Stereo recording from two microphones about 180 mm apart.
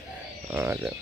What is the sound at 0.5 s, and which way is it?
Speech, 10° right (ahead or behind).